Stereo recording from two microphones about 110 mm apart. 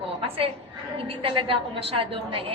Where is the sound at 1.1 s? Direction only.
55° right (ahead or behind).